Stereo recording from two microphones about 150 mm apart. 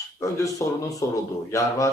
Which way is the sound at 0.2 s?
20° left (ahead or behind).